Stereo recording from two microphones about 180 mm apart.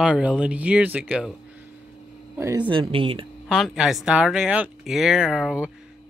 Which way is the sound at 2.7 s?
30° right (ahead or behind).